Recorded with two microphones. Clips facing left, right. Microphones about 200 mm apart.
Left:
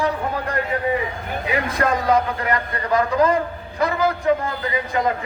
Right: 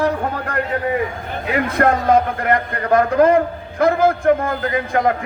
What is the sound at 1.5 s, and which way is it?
A man's voice, 55° right (ahead or behind).